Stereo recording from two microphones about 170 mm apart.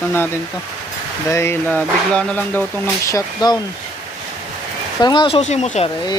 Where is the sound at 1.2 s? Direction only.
15° left (ahead or behind).